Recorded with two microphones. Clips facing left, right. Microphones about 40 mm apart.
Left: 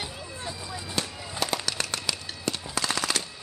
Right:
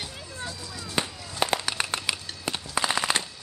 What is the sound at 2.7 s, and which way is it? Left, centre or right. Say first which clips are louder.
Machine gun: right 4 dB; right.